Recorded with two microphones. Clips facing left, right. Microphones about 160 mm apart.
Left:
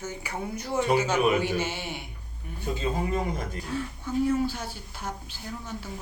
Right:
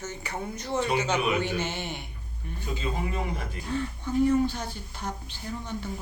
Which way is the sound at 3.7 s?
5° left (ahead or behind).